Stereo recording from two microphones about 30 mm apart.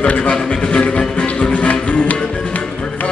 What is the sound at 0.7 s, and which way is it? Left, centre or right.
Music, left.